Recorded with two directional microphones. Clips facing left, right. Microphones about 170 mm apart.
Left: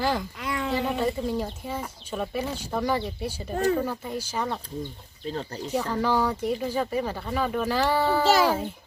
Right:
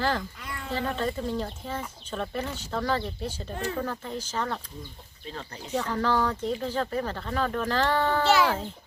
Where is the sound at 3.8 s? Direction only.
10° left (ahead or behind).